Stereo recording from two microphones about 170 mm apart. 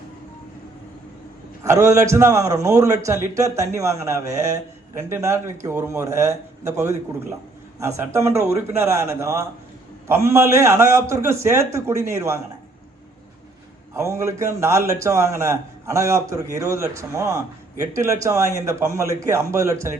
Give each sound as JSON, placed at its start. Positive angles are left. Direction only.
{"t": 1.6, "sound": "a man's voice", "side_deg": -15}
{"t": 13.9, "sound": "a man's voice", "side_deg": -15}